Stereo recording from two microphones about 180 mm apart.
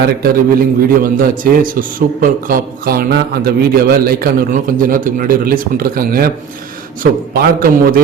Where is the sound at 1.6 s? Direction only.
50° right (ahead or behind).